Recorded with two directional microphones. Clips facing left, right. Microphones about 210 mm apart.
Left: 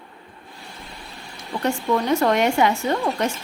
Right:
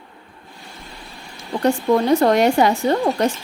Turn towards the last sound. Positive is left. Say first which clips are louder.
# right 4 dB
turn(degrees=-35)  # may be behind; listen again after turning